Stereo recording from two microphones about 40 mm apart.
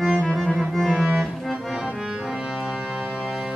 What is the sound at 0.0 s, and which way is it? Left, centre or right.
Music, centre.